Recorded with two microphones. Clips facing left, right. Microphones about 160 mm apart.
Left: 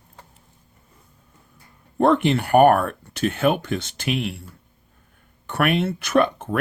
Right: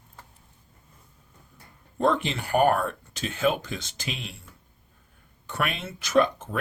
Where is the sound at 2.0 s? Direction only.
60° left (ahead or behind).